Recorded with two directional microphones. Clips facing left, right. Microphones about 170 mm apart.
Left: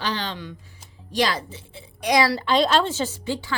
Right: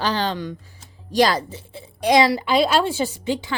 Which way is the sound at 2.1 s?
20° right (ahead or behind).